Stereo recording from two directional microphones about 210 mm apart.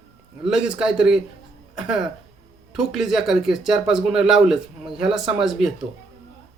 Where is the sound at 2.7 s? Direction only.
Centre (ahead or behind).